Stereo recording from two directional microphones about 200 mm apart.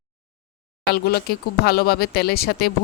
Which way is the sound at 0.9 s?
50° left (ahead or behind).